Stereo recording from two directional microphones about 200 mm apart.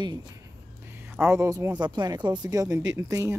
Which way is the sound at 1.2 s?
15° right (ahead or behind).